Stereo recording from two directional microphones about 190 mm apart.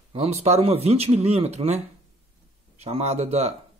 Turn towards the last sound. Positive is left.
turn(degrees=-35)  # may be behind; listen again after turning